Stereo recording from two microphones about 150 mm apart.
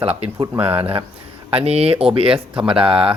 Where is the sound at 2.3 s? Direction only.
10° right (ahead or behind).